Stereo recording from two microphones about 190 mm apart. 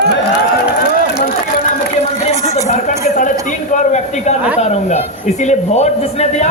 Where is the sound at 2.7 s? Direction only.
40° left (ahead or behind).